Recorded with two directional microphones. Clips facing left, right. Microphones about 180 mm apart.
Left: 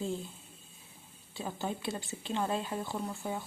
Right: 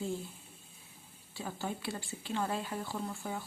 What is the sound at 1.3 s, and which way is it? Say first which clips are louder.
Speech: left 2 dB; 20° left (ahead or behind).